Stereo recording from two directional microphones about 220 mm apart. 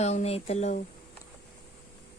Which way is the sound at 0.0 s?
30° left (ahead or behind).